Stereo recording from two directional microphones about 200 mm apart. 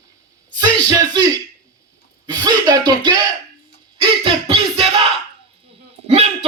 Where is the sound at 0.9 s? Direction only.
20° right (ahead or behind).